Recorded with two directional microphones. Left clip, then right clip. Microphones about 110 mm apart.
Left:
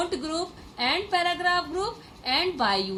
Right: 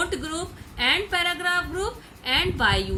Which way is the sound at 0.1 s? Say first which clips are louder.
Right 1 dB; 30° left (ahead or behind).